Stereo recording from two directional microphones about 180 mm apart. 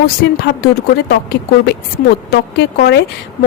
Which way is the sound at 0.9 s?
65° left (ahead or behind).